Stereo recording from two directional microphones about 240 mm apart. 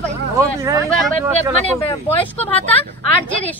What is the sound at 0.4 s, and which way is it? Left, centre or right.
Speech, centre.